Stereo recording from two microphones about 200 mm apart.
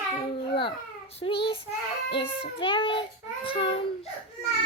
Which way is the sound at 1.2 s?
25° left (ahead or behind).